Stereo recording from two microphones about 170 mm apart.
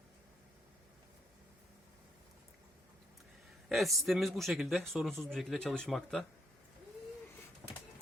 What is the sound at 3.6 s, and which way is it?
Speech, centre (ahead or behind).